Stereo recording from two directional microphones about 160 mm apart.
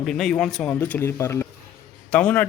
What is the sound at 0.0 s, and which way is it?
A man's voice, 5° left (ahead or behind).